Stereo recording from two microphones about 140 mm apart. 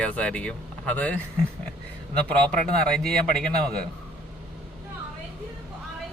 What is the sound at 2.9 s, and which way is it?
Speech, 5° left (ahead or behind).